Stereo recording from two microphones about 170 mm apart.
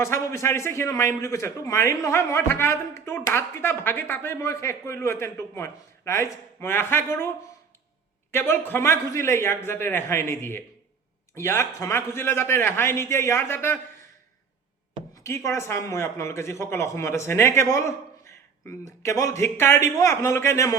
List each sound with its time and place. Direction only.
0.0 s a man's voice: 15° left (ahead or behind)
8.3 s a man's voice: 15° left (ahead or behind)
15.1 s a man's voice: 15° left (ahead or behind)